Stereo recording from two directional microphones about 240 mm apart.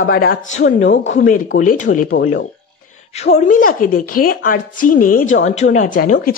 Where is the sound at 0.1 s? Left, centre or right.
Left.